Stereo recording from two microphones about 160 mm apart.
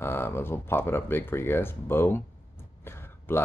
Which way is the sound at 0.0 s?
15° left (ahead or behind).